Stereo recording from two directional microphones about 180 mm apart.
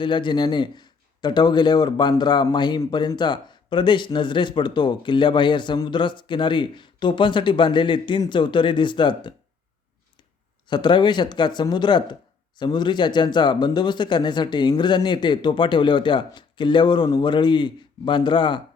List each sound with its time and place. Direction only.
0.0 s a man's voice: 25° left (ahead or behind)
10.7 s a man's voice: 25° left (ahead or behind)